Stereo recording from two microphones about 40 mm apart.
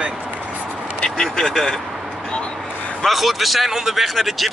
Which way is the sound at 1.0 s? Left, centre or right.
Centre.